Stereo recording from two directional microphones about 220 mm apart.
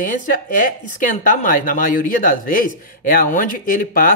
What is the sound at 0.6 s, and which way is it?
Speech, 35° left (ahead or behind).